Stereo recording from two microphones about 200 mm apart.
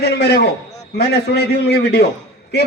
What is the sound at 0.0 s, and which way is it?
A man's voice, 55° left (ahead or behind).